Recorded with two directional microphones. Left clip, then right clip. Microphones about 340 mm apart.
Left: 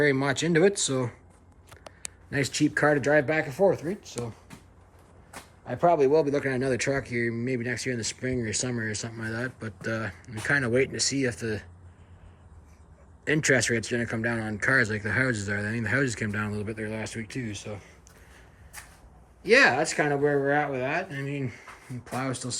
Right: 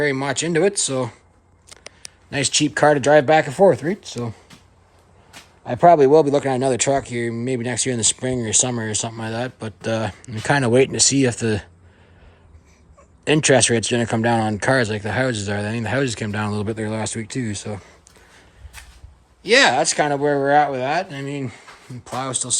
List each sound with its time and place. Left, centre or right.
0.0 s speech: centre
2.3 s speech: centre
5.6 s speech: right
13.2 s speech: centre
16.7 s speech: right
19.4 s speech: centre